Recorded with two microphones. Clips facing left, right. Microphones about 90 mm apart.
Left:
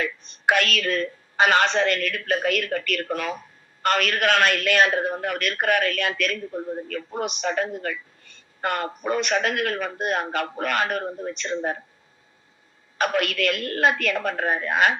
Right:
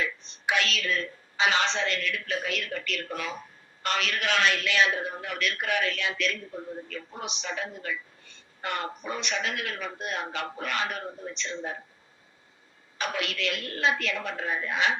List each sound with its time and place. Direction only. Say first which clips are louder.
0.0 s a man's voice: left 7 dB; 50° left (ahead or behind)
13.0 s a man's voice: left 8 dB; 50° left (ahead or behind)